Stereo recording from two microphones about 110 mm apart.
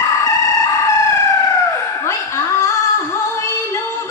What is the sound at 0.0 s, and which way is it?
Chicken, 30° left (ahead or behind).